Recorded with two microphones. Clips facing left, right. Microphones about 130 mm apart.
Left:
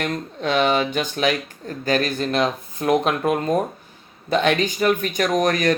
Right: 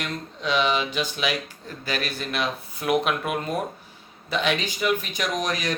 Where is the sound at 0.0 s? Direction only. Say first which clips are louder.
Left 6 dB; 50° left (ahead or behind).